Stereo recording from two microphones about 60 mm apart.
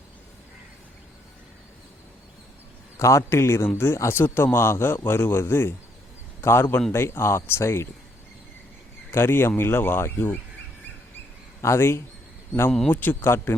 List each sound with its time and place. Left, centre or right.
3.0 s speech: left
9.1 s speech: left
11.6 s speech: left
12.9 s speech: left